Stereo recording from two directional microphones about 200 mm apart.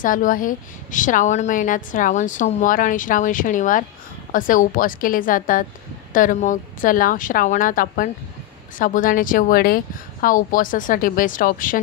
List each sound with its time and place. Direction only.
0.0 s a woman's voice: 40° left (ahead or behind)